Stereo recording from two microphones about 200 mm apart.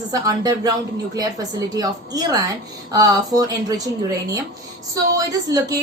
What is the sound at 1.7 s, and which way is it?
A woman's voice, 15° right (ahead or behind).